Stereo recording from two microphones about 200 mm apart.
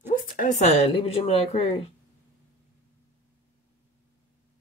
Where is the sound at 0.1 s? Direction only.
40° left (ahead or behind).